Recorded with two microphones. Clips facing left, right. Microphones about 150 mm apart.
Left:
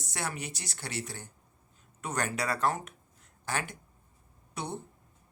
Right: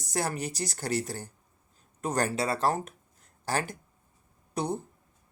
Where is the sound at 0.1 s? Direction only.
40° right (ahead or behind).